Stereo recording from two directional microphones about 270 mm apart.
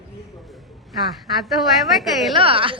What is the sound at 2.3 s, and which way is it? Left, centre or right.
Speech, centre.